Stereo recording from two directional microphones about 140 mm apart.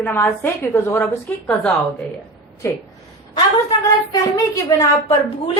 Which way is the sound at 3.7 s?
25° left (ahead or behind).